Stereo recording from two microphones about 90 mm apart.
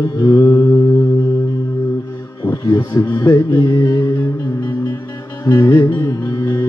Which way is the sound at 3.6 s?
50° left (ahead or behind).